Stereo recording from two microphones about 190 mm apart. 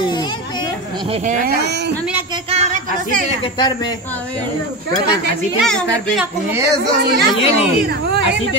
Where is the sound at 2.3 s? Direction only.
30° right (ahead or behind).